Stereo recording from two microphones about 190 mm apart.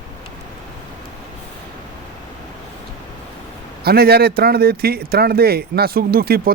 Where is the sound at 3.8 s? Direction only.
55° right (ahead or behind).